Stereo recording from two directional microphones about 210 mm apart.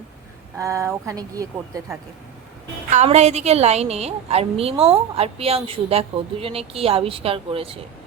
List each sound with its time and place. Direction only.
0.5 s speech: 15° right (ahead or behind)
2.9 s a woman's voice: 30° right (ahead or behind)